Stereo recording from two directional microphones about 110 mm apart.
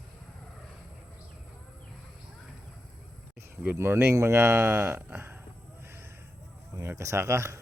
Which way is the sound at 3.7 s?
20° right (ahead or behind).